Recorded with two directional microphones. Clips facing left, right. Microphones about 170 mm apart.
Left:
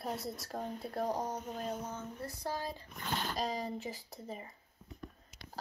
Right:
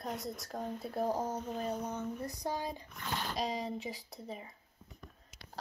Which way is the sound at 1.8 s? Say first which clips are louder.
Right 4 dB; 15° right (ahead or behind).